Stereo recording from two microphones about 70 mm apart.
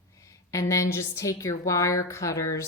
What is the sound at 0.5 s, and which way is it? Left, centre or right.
A woman's voice, left.